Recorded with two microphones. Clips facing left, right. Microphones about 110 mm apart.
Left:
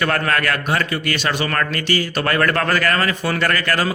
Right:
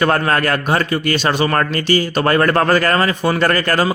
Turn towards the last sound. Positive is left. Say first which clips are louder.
# right 4 dB
turn(degrees=-30)  # may be behind; listen again after turning